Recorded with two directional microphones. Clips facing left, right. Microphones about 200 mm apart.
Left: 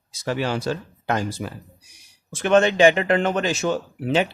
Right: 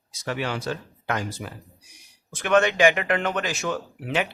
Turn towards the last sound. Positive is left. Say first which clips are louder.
# left 5 dB
turn(degrees=30)  # may be behind; listen again after turning